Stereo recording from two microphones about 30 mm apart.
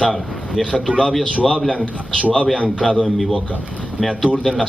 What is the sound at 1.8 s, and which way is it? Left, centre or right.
Speech, left.